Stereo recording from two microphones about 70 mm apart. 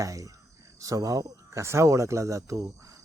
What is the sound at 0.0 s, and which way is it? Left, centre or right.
Speech, right.